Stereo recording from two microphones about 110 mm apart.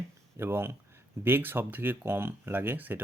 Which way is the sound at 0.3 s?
20° right (ahead or behind).